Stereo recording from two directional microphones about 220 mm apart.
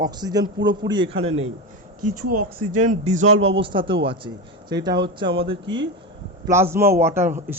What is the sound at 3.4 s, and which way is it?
Speech, 25° right (ahead or behind).